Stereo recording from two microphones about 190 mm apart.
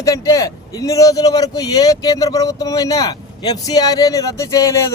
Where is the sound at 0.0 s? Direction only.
15° left (ahead or behind).